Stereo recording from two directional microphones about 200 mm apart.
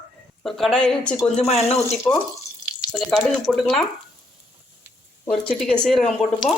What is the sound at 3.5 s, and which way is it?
Speech, centre (ahead or behind).